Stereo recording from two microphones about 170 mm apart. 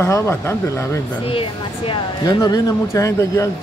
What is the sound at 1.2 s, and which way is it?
Speech, 30° left (ahead or behind).